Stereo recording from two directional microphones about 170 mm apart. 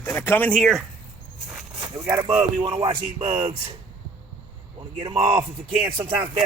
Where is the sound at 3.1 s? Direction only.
40° right (ahead or behind).